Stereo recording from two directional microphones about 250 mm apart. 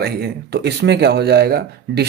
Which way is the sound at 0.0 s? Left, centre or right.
Right.